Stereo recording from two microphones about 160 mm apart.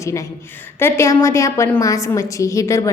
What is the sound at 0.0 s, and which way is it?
A woman's voice, 20° left (ahead or behind).